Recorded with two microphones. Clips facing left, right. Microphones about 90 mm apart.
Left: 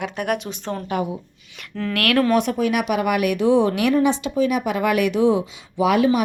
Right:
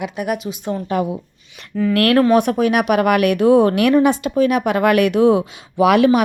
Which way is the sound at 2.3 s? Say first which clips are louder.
Right 5 dB; 55° right (ahead or behind).